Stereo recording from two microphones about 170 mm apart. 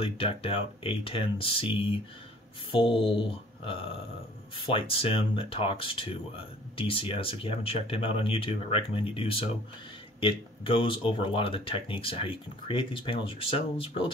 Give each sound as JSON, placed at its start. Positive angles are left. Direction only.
{"t": 0.0, "sound": "speech", "side_deg": 35}